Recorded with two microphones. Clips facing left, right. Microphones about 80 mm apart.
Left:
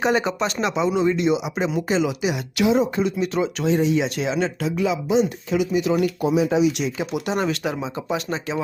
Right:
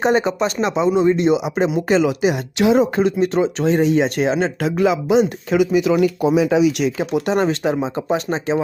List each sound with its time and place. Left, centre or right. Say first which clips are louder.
0.0 s speech: right 4 dB; right
1.3 s speech: right 5 dB; right
4.6 s speech: right 5 dB; right
7.0 s speech: right 5 dB; right